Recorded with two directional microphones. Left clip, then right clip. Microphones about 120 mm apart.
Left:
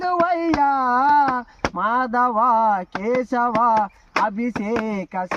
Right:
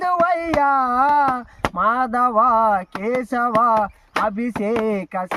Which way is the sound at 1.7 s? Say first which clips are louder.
Right 2 dB; 25° right (ahead or behind).